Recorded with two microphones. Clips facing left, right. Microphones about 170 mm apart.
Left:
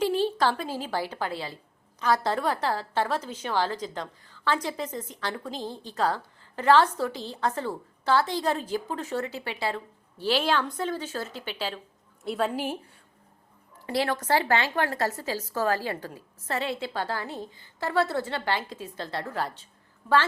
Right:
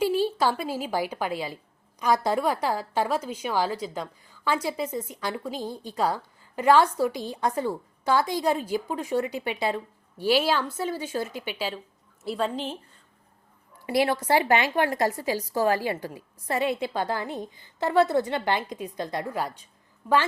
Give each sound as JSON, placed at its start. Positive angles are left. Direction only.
{"t": 0.0, "sound": "a woman's voice", "side_deg": -10}
{"t": 12.2, "sound": "a woman's voice", "side_deg": 0}
{"t": 13.8, "sound": "a woman's voice", "side_deg": -10}